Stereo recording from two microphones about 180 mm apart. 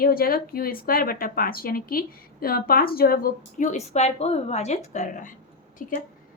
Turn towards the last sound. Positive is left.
turn(degrees=50)  # may be behind; listen again after turning